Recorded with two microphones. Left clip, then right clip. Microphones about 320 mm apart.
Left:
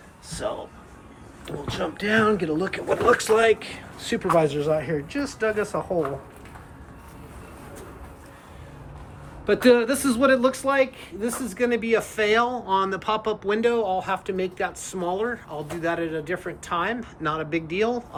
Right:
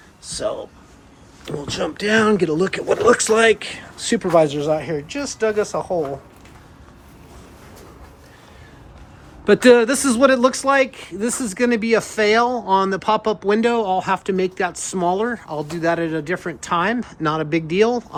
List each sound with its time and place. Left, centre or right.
1.5 s a man's voice: right
9.5 s a man's voice: right